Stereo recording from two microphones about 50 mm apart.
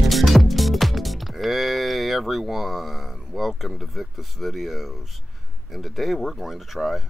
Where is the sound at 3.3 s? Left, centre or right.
Centre.